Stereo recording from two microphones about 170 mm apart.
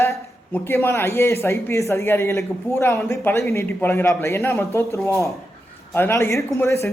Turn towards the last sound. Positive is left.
turn(degrees=15)  # may be behind; listen again after turning